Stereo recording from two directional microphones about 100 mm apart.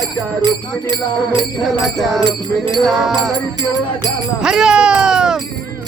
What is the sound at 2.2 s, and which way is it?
Music, 50° right (ahead or behind).